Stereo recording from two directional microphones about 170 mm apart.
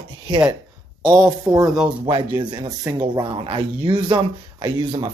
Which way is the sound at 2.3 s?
25° right (ahead or behind).